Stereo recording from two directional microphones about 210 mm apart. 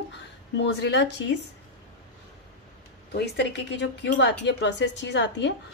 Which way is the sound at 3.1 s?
50° left (ahead or behind).